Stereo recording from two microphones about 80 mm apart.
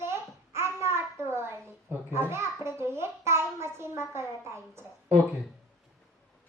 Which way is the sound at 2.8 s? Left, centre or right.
Right.